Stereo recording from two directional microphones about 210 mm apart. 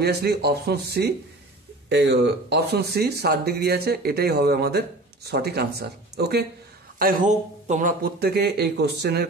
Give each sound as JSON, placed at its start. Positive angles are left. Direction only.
{"t": 0.0, "sound": "speech", "side_deg": -50}